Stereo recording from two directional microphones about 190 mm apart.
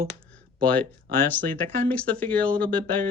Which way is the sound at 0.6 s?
5° left (ahead or behind).